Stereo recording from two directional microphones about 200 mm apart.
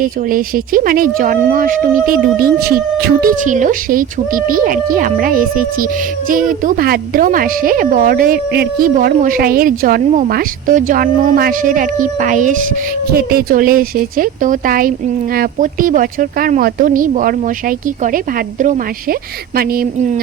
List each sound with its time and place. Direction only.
0.0 s speech: 45° right (ahead or behind)